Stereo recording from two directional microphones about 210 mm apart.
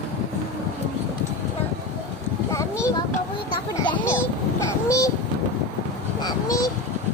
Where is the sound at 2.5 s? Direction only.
15° left (ahead or behind).